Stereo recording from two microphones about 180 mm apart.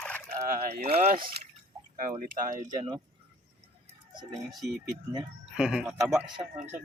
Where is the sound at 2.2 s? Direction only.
50° right (ahead or behind).